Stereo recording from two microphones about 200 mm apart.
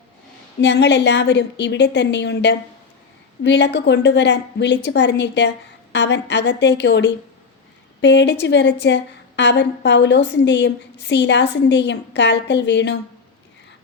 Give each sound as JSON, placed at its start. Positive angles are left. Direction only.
{"t": 0.6, "sound": "a woman's voice", "side_deg": 60}